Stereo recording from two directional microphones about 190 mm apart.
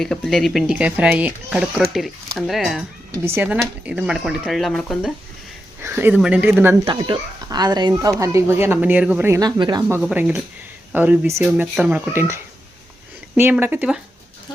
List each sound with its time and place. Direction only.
0.0 s speech: centre (ahead or behind)
3.1 s speech: 10° right (ahead or behind)
5.8 s speech: 10° right (ahead or behind)
6.8 s speech: 25° right (ahead or behind)
10.0 s speech: 5° right (ahead or behind)